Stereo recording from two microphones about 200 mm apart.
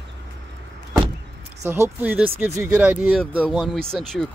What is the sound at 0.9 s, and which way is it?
Vehicle, 25° right (ahead or behind).